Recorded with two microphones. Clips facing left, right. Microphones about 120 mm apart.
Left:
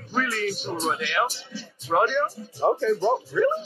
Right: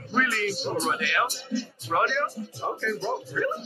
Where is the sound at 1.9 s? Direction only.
20° left (ahead or behind).